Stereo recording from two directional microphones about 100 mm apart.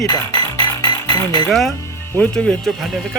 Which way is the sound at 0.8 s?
40° left (ahead or behind).